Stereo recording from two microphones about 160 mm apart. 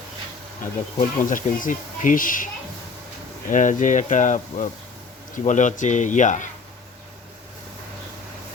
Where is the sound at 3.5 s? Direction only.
50° left (ahead or behind).